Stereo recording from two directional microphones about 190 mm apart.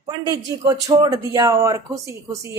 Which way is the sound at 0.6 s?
20° right (ahead or behind).